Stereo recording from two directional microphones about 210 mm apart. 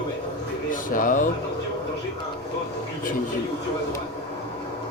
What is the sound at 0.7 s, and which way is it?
Speech, 40° left (ahead or behind).